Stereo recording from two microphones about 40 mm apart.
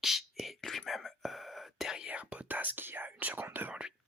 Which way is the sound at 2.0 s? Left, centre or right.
Right.